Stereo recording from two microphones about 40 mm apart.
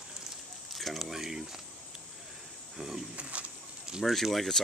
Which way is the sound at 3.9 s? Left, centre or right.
Centre.